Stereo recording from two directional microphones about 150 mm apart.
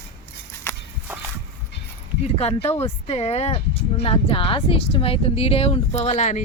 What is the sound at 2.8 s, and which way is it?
Speech, 40° left (ahead or behind).